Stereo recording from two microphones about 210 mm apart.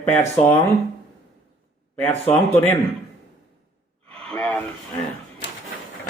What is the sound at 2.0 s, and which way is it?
Speech, 10° left (ahead or behind).